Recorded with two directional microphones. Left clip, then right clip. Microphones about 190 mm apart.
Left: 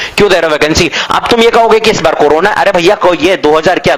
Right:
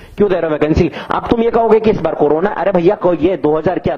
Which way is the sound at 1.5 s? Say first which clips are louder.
Left 2 dB; 20° left (ahead or behind).